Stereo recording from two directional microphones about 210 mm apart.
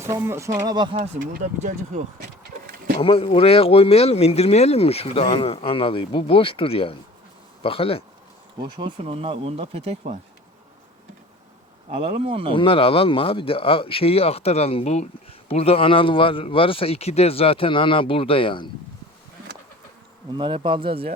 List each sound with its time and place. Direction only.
0.0 s speech: 10° right (ahead or behind)
0.9 s speech: 40° right (ahead or behind)
3.0 s speech: 25° left (ahead or behind)
8.8 s speech: 25° right (ahead or behind)
12.2 s speech: 25° right (ahead or behind)
12.5 s speech: 25° left (ahead or behind)
20.3 s speech: 25° right (ahead or behind)